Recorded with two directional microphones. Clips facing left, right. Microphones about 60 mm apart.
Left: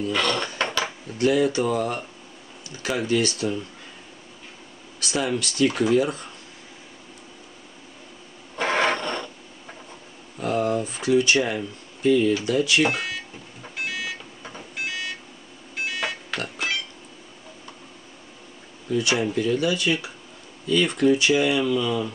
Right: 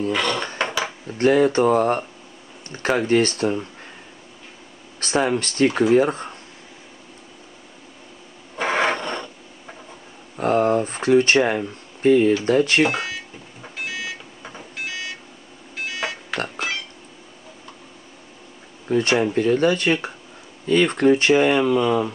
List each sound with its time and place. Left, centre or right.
0.1 s speech: centre
0.6 s dishes: centre
1.1 s speech: right
5.0 s speech: right
8.5 s a sound: centre
10.3 s speech: right
13.6 s a sound: centre
16.0 s pig: centre
18.9 s speech: right